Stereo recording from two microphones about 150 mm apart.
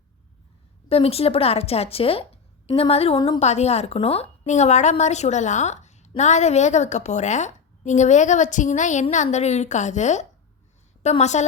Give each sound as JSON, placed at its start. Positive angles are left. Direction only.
{"t": 0.9, "sound": "speech", "side_deg": 40}
{"t": 3.2, "sound": "a woman's voice", "side_deg": 30}
{"t": 3.4, "sound": "a woman's voice", "side_deg": 45}